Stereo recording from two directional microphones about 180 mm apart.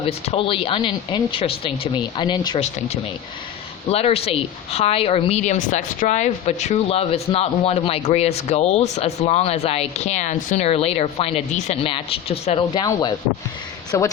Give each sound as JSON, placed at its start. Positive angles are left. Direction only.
{"t": 0.0, "sound": "a woman's voice", "side_deg": 35}
{"t": 2.6, "sound": "a woman's voice", "side_deg": 35}